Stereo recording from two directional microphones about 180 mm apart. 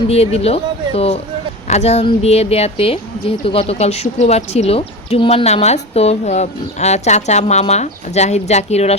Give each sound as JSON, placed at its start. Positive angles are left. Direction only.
{"t": 0.1, "sound": "speech", "side_deg": 35}